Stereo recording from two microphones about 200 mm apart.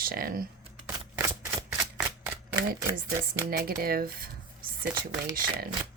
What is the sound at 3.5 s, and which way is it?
Speech, 50° right (ahead or behind).